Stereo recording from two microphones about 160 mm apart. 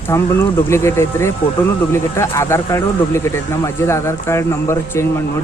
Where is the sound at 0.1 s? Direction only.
20° left (ahead or behind).